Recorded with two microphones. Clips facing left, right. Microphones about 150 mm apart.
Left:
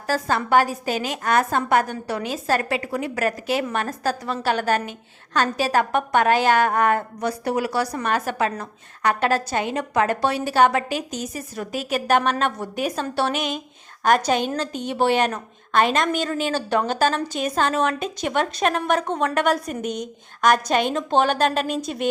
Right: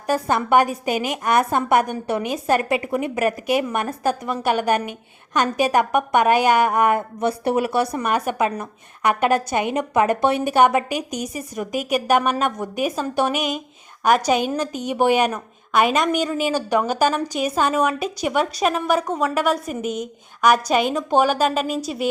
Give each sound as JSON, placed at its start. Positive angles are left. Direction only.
{"t": 0.1, "sound": "a woman's voice", "side_deg": -20}